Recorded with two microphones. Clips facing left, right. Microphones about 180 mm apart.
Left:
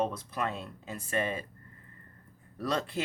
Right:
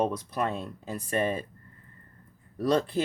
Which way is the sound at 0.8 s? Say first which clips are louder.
Right 4 dB; 35° right (ahead or behind).